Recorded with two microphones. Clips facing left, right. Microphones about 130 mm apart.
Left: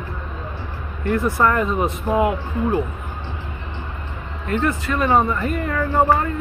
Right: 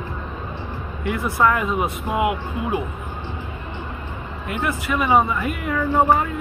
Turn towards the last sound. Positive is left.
turn(degrees=-5)  # may be behind; listen again after turning